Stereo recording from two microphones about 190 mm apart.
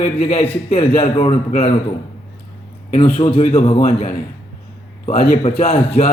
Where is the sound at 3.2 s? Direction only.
30° left (ahead or behind).